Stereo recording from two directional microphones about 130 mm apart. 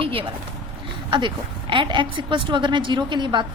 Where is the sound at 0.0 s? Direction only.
45° right (ahead or behind).